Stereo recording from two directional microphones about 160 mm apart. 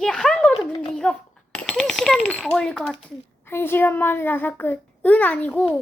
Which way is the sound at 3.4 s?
15° left (ahead or behind).